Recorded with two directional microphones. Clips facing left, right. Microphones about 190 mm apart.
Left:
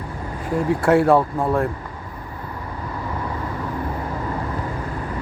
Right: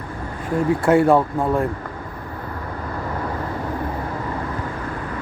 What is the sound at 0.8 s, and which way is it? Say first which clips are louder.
Speech: even; centre (ahead or behind).